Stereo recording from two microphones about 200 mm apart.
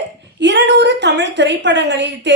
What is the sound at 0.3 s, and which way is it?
A woman's voice, 60° right (ahead or behind).